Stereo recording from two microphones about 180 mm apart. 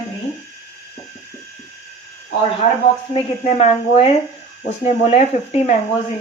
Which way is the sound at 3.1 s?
35° left (ahead or behind).